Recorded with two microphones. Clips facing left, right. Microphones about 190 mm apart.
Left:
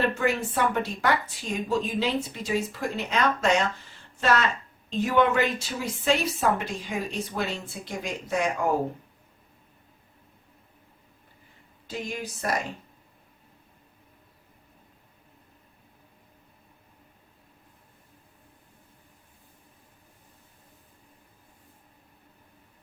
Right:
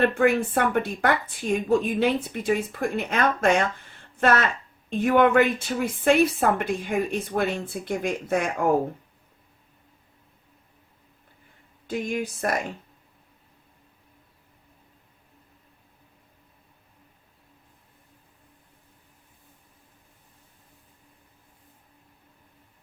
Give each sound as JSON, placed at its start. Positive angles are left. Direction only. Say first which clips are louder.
{"t": 0.0, "sound": "a woman's voice", "louder": "right 5 dB", "side_deg": -55}
{"t": 11.9, "sound": "speech", "louder": "right 6 dB", "side_deg": -55}